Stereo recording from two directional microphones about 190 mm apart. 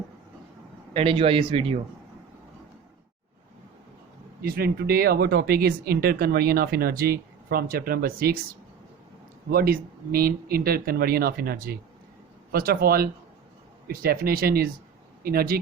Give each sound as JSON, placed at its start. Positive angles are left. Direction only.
{"t": 0.9, "sound": "speech", "side_deg": -30}
{"t": 4.4, "sound": "speech", "side_deg": -55}
{"t": 9.5, "sound": "speech", "side_deg": -50}